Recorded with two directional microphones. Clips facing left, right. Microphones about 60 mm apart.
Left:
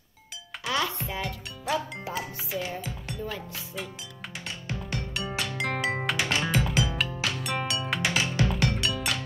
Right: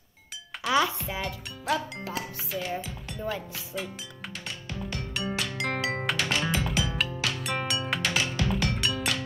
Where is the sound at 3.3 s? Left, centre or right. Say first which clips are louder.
Right 3 dB; centre.